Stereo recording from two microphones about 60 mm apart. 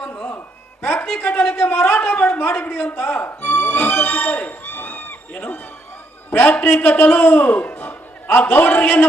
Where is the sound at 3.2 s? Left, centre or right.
Left.